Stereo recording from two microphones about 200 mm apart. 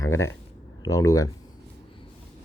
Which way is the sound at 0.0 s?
15° left (ahead or behind).